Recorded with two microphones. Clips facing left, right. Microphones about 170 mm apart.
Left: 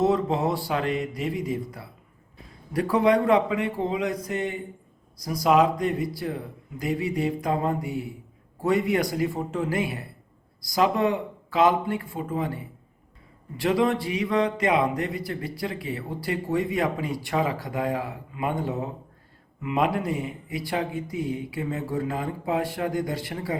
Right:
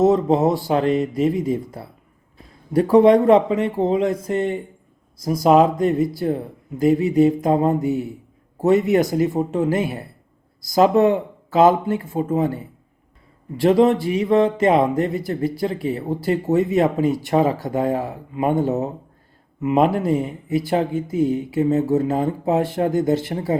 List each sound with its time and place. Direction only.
0.0 s speech: 20° right (ahead or behind)
2.7 s speech: 25° right (ahead or behind)